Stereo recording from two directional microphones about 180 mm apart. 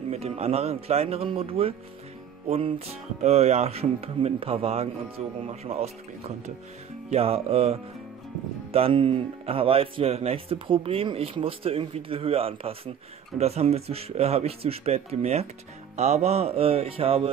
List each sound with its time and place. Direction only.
0.1 s speech: 35° right (ahead or behind)
3.2 s speech: 35° right (ahead or behind)